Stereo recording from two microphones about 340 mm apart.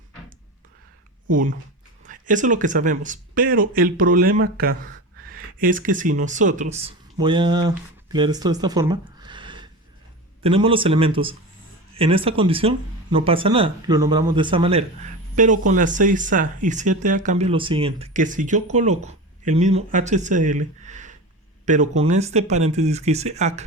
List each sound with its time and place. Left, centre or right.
1.3 s speech: right